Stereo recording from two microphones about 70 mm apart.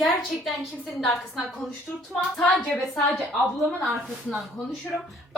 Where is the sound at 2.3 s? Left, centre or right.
Centre.